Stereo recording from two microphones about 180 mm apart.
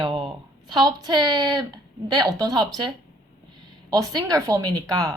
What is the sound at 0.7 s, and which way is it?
A woman's voice, 25° right (ahead or behind).